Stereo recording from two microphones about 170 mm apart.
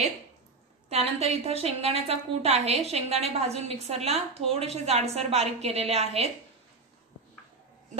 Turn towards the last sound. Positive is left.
turn(degrees=-40)  # may be behind; listen again after turning